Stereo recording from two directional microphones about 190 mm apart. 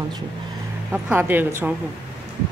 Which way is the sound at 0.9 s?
10° right (ahead or behind).